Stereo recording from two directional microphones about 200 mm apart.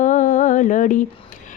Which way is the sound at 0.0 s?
40° left (ahead or behind).